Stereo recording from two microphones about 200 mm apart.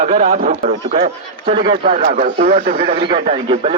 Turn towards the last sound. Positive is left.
turn(degrees=-30)  # may be behind; listen again after turning